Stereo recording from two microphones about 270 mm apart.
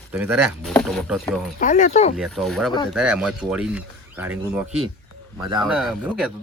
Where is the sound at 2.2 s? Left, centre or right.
Centre.